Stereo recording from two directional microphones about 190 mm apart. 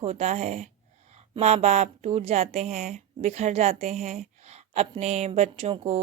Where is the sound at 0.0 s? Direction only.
35° right (ahead or behind).